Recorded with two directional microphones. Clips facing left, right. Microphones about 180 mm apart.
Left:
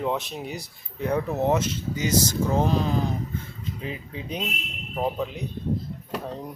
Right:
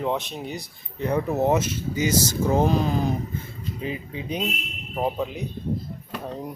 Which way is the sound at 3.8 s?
Centre (ahead or behind).